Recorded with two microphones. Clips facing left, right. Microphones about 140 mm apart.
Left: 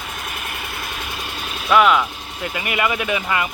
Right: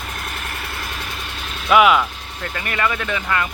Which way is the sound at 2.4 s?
10° left (ahead or behind).